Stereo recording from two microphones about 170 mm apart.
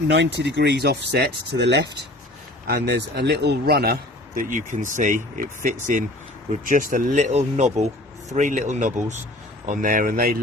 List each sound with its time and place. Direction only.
0.1 s speech: 90° right
2.6 s speech: 70° right (ahead or behind)
4.4 s speech: 50° right (ahead or behind)